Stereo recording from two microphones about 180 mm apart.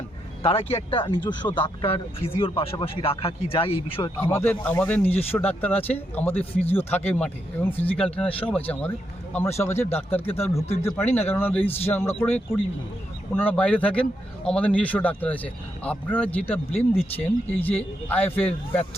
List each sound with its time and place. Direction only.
0.4 s speech: 35° left (ahead or behind)
4.2 s speech: 15° left (ahead or behind)